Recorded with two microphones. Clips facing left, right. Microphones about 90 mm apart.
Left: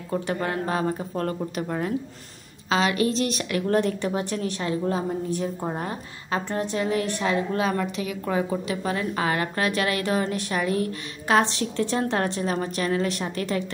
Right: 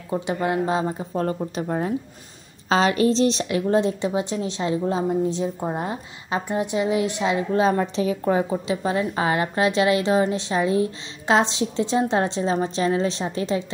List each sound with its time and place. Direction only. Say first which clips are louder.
0.1 s a woman's voice: right 3 dB; 15° right (ahead or behind)
7.6 s a woman's voice: right 5 dB; 30° right (ahead or behind)